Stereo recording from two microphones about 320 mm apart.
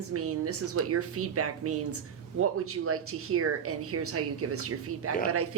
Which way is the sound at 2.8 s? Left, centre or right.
Right.